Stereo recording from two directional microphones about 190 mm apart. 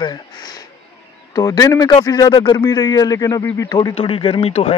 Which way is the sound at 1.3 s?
20° left (ahead or behind).